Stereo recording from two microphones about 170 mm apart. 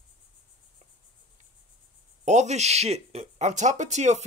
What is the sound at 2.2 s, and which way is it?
Speech, 45° right (ahead or behind).